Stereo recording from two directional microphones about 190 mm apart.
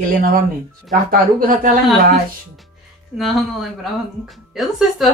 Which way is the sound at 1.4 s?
45° right (ahead or behind).